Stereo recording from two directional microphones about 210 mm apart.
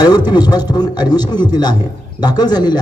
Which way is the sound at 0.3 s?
20° left (ahead or behind).